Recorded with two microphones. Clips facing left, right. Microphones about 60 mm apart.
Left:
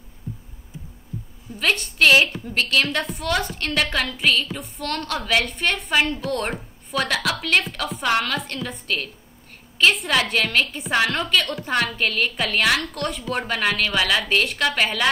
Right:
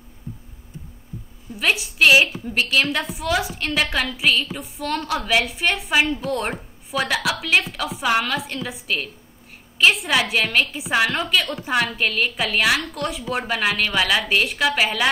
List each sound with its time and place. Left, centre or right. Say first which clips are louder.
1.5 s a woman's voice: right 1 dB; centre